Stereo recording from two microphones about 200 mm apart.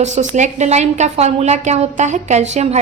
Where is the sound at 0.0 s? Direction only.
35° right (ahead or behind).